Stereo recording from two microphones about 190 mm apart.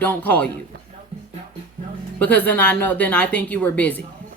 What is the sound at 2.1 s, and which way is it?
A woman's voice, 10° left (ahead or behind).